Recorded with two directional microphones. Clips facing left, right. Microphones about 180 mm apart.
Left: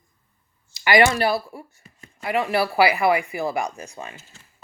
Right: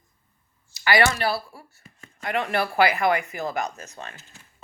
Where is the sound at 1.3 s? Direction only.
20° left (ahead or behind).